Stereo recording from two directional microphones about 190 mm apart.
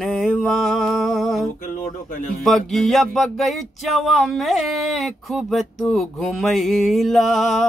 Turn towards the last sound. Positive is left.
turn(degrees=0)  # may be behind; listen again after turning